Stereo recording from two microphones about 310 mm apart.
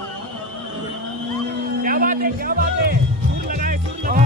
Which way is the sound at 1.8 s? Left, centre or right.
Right.